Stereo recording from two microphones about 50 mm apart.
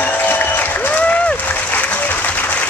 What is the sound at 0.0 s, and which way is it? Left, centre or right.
Applause, left.